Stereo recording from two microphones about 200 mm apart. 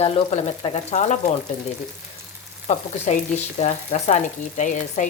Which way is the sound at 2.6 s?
35° left (ahead or behind).